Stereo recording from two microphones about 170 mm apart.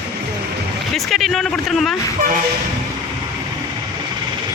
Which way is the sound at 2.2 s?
55° right (ahead or behind).